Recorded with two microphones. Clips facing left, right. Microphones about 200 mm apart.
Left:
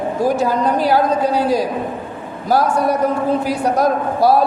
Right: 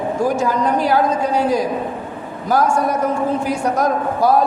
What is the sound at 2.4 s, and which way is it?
A man's voice, 35° left (ahead or behind).